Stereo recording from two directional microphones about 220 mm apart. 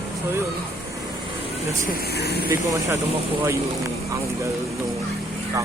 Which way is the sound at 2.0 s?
45° left (ahead or behind).